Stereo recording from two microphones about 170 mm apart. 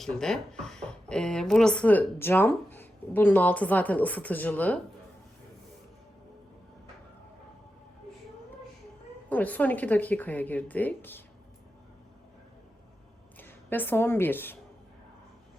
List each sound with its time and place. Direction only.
0.0 s speech: 5° left (ahead or behind)
9.3 s speech: 10° left (ahead or behind)
13.4 s a woman's voice: 10° left (ahead or behind)